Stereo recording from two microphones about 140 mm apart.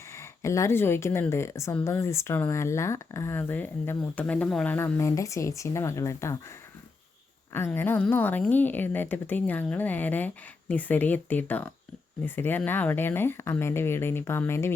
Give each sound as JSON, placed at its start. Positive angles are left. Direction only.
{"t": 0.1, "sound": "speech", "side_deg": 20}
{"t": 7.5, "sound": "speech", "side_deg": 15}